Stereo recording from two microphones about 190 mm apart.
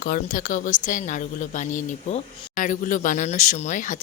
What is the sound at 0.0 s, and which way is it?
Speech, 45° left (ahead or behind).